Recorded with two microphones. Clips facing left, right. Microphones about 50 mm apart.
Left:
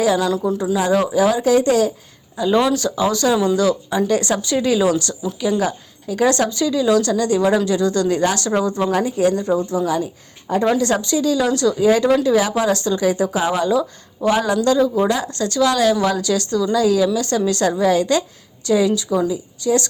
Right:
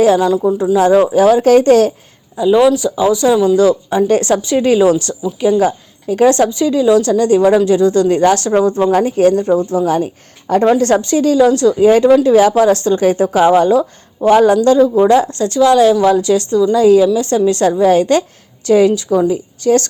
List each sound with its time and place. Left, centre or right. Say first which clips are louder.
0.3 s speech: right 6 dB; centre
0.8 s speech: right 7 dB; right
2.4 s speech: right 6 dB; centre
3.6 s a woman's voice: right 6 dB; right